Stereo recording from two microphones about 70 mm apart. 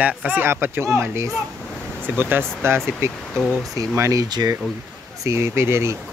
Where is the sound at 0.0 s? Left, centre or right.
Centre.